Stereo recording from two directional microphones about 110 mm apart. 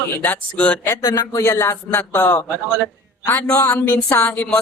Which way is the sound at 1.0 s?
30° left (ahead or behind).